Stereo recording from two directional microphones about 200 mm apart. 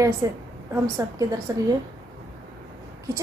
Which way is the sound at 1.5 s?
20° right (ahead or behind).